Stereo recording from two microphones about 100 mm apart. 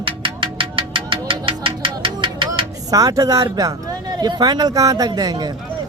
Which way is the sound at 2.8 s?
35° right (ahead or behind).